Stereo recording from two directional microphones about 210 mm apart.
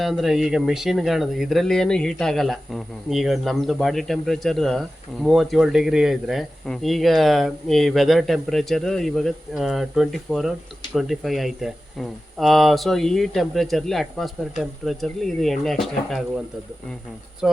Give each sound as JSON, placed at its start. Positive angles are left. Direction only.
{"t": 0.0, "sound": "speech", "side_deg": 0}
{"t": 17.4, "sound": "speech", "side_deg": 0}